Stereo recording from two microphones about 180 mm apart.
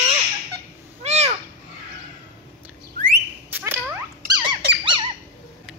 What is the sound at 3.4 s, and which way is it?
Dog, 10° right (ahead or behind).